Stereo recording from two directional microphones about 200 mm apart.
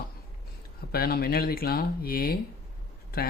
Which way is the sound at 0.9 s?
50° left (ahead or behind).